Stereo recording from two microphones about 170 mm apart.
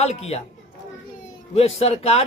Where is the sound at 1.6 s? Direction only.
35° left (ahead or behind).